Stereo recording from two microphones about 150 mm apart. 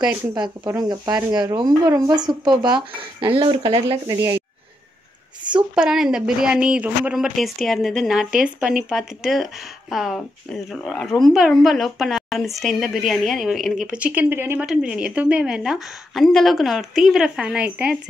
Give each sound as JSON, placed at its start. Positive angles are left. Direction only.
{"t": 0.3, "sound": "speech", "side_deg": -25}
{"t": 4.1, "sound": "speech", "side_deg": -20}
{"t": 5.8, "sound": "a woman's voice", "side_deg": -5}